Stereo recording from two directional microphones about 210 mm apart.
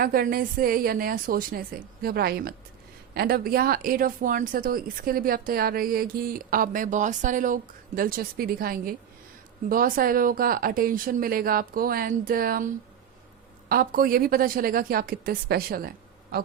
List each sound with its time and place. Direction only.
0.0 s speech: 45° right (ahead or behind)